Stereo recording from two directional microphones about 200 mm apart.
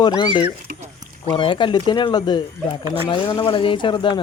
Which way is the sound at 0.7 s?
40° right (ahead or behind).